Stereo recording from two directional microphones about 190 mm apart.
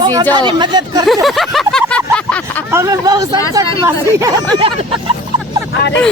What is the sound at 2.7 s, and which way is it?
Speech, 15° right (ahead or behind).